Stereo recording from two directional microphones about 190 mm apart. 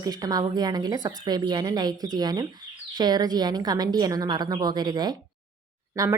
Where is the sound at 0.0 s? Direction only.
20° right (ahead or behind).